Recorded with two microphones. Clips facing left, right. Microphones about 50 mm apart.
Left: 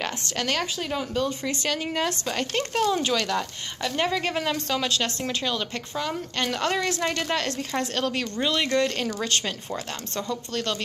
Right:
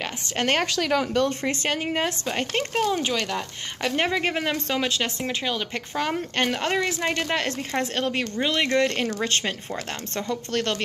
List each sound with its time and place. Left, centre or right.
0.4 s a woman's voice: right
0.7 s speech: right
1.4 s a woman's voice: right; by 3.4 s centre
3.8 s a woman's voice: right
5.9 s a woman's voice: right